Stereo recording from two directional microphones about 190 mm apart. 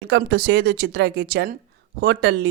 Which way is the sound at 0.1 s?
55° right (ahead or behind).